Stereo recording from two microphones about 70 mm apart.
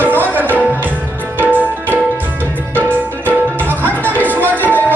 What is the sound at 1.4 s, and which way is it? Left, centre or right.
Music, right.